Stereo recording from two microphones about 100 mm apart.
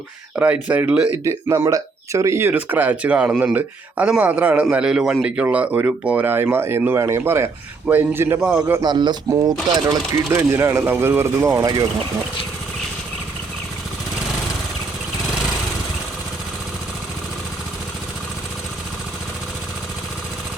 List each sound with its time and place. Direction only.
0.3 s speech: 15° right (ahead or behind)
1.1 s speech: 30° right (ahead or behind)
2.5 s speech: 15° right (ahead or behind)
8.4 s a man's voice: 5° right (ahead or behind)
8.8 s speech: 45° right (ahead or behind)
9.3 s speech: 35° right (ahead or behind)
11.6 s speech: 40° right (ahead or behind)